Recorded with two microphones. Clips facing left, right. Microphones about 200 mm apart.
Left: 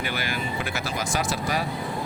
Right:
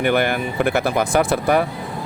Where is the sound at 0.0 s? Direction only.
60° right (ahead or behind).